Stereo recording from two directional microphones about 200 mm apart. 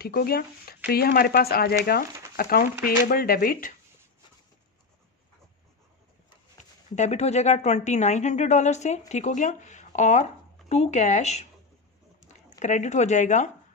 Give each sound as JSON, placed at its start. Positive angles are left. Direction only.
{"t": 0.0, "sound": "speech", "side_deg": 50}
{"t": 7.0, "sound": "a woman's voice", "side_deg": 35}